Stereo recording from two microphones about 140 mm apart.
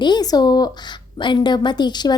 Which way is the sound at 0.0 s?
30° left (ahead or behind).